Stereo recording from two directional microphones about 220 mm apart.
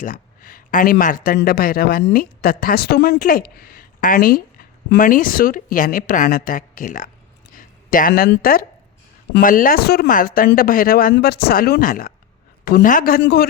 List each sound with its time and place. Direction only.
0.0 s speech: 40° left (ahead or behind)